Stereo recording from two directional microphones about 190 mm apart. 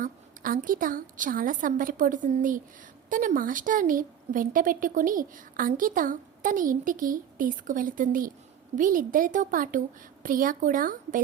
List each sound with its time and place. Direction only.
0.0 s a woman's voice: 45° right (ahead or behind)